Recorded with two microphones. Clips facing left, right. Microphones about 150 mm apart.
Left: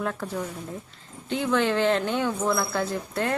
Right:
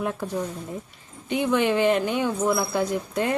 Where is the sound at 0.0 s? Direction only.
15° right (ahead or behind).